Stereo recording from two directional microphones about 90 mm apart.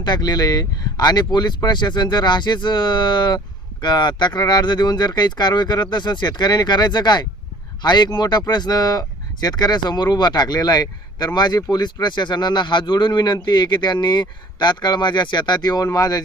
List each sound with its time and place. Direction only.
0.0 s speech: 50° left (ahead or behind)